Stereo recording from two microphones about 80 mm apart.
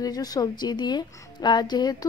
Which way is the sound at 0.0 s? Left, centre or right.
Left.